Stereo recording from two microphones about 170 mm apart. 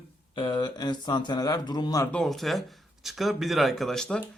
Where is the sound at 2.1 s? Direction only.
Centre (ahead or behind).